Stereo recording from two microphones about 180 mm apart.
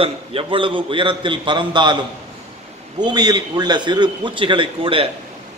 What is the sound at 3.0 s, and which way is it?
Speech, 25° right (ahead or behind).